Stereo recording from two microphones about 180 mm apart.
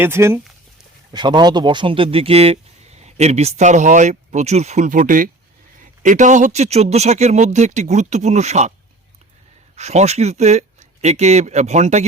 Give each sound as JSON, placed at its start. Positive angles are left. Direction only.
{"t": 0.0, "sound": "speech", "side_deg": -15}
{"t": 1.1, "sound": "speech", "side_deg": -25}
{"t": 9.7, "sound": "speech", "side_deg": -40}